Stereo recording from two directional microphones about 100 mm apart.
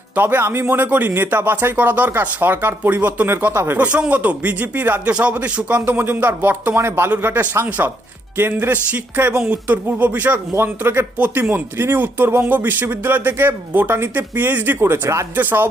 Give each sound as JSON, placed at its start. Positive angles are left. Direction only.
{"t": 0.2, "sound": "speech", "side_deg": -20}